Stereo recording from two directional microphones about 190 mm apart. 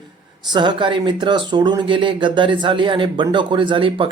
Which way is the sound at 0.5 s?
25° right (ahead or behind).